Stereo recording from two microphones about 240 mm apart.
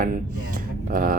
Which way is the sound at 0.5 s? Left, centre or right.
Right.